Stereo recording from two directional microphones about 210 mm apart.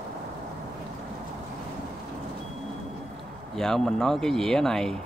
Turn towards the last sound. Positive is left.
turn(degrees=0)  # may be behind; listen again after turning